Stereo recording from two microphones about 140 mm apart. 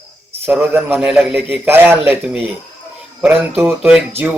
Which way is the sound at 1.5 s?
15° right (ahead or behind).